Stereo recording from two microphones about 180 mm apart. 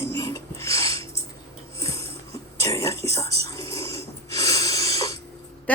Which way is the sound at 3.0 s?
15° left (ahead or behind).